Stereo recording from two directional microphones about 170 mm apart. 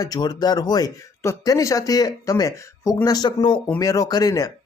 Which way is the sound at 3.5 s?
5° left (ahead or behind).